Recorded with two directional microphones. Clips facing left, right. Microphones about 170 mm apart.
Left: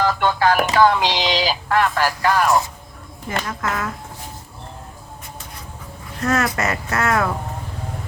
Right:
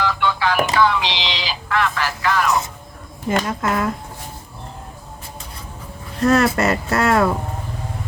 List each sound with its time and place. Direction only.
0.0 s speech: 45° left (ahead or behind)
3.2 s speech: 25° right (ahead or behind)
6.2 s speech: 30° right (ahead or behind)